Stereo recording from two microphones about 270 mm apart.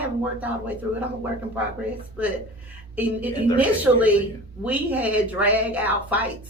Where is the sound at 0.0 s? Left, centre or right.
Centre.